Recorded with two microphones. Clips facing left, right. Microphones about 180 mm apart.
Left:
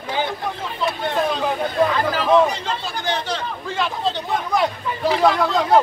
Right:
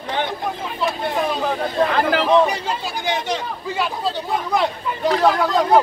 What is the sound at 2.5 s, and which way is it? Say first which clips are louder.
Speech: right 2 dB; 15° right (ahead or behind).